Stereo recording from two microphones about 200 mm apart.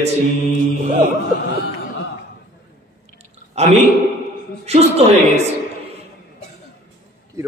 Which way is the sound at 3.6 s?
35° right (ahead or behind).